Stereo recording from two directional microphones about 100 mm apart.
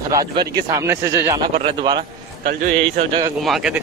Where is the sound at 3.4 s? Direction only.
Centre (ahead or behind).